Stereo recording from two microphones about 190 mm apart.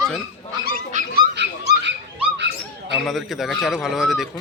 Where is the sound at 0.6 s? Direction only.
45° right (ahead or behind).